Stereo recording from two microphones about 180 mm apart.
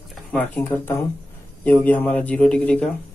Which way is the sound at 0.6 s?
10° left (ahead or behind).